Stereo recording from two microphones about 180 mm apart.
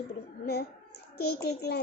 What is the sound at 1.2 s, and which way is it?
Speech, 65° left (ahead or behind).